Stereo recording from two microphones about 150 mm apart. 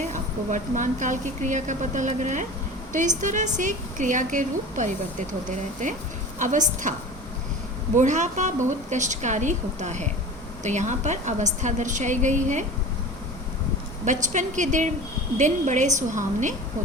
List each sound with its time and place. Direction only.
0.0 s a woman's voice: 55° right (ahead or behind)
7.9 s a woman's voice: 55° right (ahead or behind)
14.0 s a woman's voice: 55° right (ahead or behind)